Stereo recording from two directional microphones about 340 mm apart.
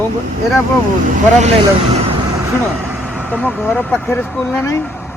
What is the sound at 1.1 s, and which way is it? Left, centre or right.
Speech, centre.